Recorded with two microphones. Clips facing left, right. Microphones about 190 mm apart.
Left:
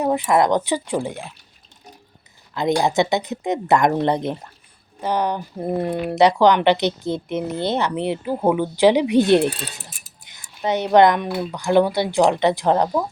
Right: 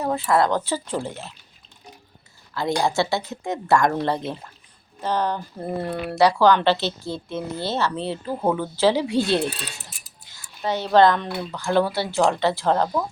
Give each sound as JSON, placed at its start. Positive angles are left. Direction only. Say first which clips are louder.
{"t": 0.0, "sound": "speech", "louder": "left 3 dB", "side_deg": 15}
{"t": 2.6, "sound": "speech", "louder": "left 4 dB", "side_deg": 20}